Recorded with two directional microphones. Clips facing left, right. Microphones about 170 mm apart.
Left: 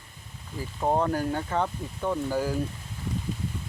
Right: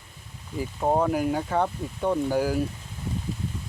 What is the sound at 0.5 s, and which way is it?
Speech, 10° right (ahead or behind).